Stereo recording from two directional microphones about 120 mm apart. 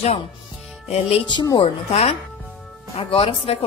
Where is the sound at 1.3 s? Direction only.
40° left (ahead or behind).